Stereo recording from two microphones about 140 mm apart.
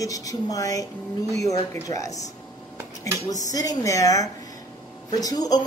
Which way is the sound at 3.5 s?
25° left (ahead or behind).